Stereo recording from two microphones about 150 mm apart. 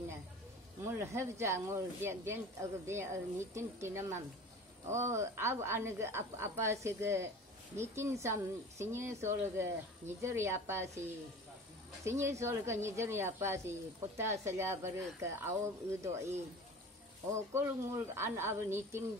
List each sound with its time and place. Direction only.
0.8 s speech: 20° right (ahead or behind)
17.3 s speech: 15° right (ahead or behind)